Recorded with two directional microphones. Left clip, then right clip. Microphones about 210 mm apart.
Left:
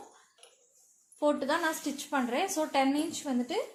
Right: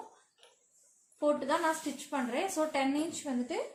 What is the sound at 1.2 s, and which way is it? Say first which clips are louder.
A woman's voice: left 1 dB; 35° left (ahead or behind).